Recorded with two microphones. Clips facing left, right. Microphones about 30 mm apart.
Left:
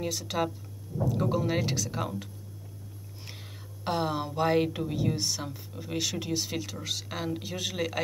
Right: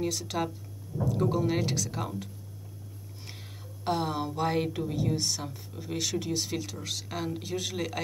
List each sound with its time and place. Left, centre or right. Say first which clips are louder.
0.0 s speech: even; centre
3.8 s speech: even; centre